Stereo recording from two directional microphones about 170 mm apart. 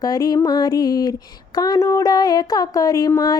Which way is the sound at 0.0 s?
20° left (ahead or behind).